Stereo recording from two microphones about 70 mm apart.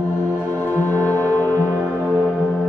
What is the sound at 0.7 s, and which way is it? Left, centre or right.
Music, left.